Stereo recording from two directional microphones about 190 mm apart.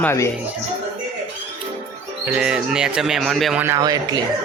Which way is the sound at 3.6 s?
15° right (ahead or behind).